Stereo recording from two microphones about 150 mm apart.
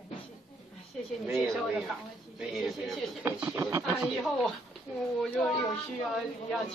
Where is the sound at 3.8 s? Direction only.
5° right (ahead or behind).